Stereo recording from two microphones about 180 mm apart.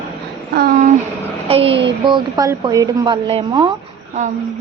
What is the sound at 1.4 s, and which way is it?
A woman's voice, 30° right (ahead or behind).